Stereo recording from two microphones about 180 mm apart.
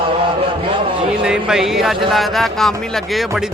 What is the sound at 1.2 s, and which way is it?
A man's voice, 5° right (ahead or behind).